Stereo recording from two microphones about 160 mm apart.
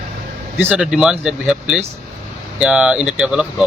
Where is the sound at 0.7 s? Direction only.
5° right (ahead or behind).